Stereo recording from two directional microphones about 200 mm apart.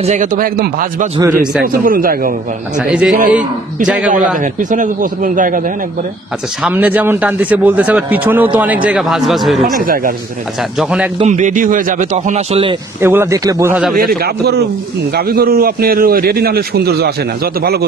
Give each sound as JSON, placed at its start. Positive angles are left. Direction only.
{"t": 0.0, "sound": "a man's voice", "side_deg": -35}
{"t": 2.8, "sound": "a man's voice", "side_deg": -5}
{"t": 4.4, "sound": "speech", "side_deg": -40}
{"t": 6.6, "sound": "a man's voice", "side_deg": -10}
{"t": 9.6, "sound": "a man's voice", "side_deg": -45}
{"t": 10.8, "sound": "a man's voice", "side_deg": -5}
{"t": 11.1, "sound": "speech", "side_deg": -35}
{"t": 13.0, "sound": "a man's voice", "side_deg": -10}
{"t": 13.9, "sound": "a man's voice", "side_deg": -50}